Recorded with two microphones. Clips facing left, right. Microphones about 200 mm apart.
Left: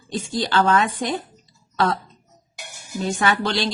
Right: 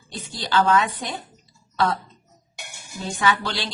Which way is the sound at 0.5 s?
50° left (ahead or behind).